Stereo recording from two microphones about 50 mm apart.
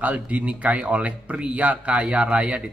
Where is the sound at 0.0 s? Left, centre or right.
Right.